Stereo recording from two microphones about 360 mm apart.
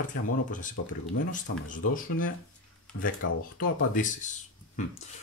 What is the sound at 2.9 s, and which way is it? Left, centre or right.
Speech, left.